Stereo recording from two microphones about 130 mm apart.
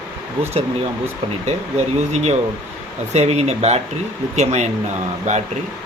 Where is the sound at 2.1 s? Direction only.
60° right (ahead or behind).